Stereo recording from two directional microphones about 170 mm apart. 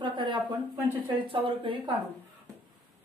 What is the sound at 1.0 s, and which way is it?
Speech, 30° right (ahead or behind).